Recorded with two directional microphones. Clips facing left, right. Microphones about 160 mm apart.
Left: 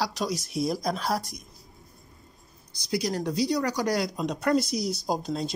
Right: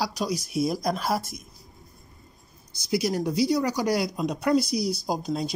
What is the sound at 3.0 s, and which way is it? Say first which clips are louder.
Speech: right 3 dB; 5° right (ahead or behind).